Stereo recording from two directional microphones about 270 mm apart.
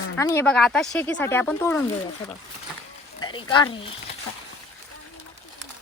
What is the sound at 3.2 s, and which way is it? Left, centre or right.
Speech, centre.